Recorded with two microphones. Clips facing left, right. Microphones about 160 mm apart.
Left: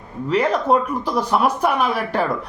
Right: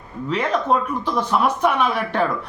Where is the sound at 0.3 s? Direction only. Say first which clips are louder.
Left 3 dB; 10° left (ahead or behind).